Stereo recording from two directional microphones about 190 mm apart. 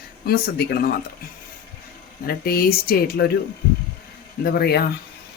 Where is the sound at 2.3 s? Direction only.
55° left (ahead or behind).